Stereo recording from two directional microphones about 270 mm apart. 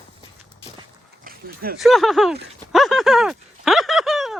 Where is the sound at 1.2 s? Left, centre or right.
Right.